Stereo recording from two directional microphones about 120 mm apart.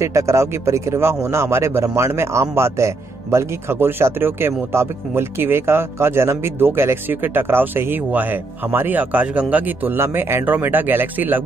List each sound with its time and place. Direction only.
0.0 s speech: 25° right (ahead or behind)